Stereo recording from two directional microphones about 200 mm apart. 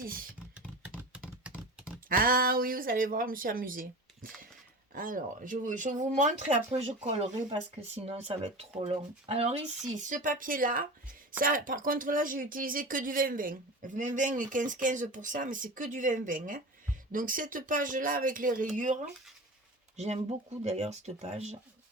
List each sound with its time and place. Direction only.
0.0 s speech: 45° right (ahead or behind)
1.1 s computer keyboard: 5° right (ahead or behind)
2.0 s speech: 45° right (ahead or behind)
20.7 s speech: 35° right (ahead or behind)